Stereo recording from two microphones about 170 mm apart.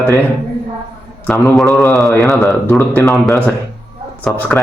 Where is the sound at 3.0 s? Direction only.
Centre (ahead or behind).